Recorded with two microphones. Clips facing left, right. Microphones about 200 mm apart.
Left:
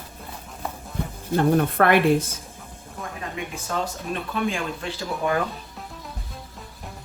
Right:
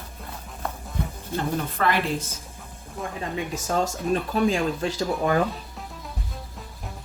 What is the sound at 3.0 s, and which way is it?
Music, centre (ahead or behind).